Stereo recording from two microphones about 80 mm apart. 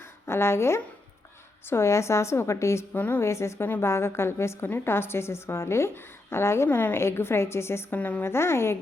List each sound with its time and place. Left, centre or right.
0.0 s a woman's voice: left
2.9 s a woman's voice: left
3.2 s a woman's voice: left
7.9 s a woman's voice: centre
8.2 s a woman's voice: left